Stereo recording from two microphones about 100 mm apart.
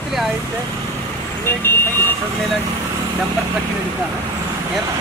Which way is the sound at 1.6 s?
20° left (ahead or behind).